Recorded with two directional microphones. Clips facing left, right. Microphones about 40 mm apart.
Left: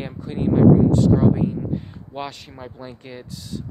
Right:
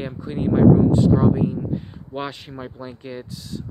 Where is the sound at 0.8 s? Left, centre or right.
Right.